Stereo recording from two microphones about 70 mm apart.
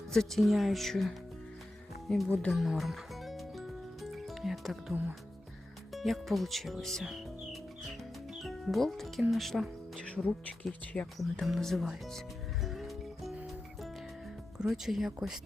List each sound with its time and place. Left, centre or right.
0.1 s speech: centre
2.5 s music: centre
5.9 s speech: centre
10.0 s speech: centre
11.2 s speech: centre
12.6 s music: centre
14.7 s speech: centre